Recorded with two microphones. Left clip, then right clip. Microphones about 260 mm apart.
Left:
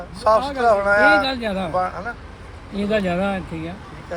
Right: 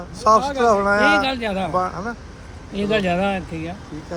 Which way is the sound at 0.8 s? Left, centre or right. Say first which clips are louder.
Left 1 dB; centre.